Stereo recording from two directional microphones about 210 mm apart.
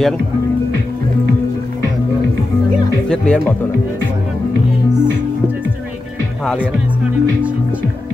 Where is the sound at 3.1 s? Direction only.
5° left (ahead or behind).